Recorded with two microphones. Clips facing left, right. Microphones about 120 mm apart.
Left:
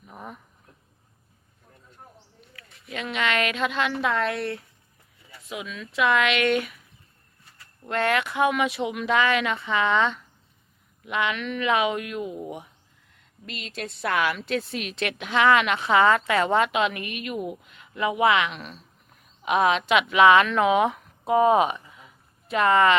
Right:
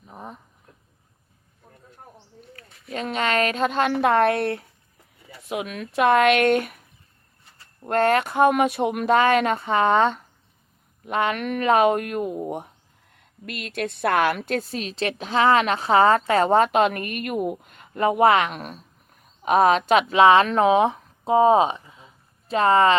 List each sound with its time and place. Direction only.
0.1 s a sound: 25° right (ahead or behind)
2.5 s a woman's voice: 40° right (ahead or behind)
7.9 s speech: 45° right (ahead or behind)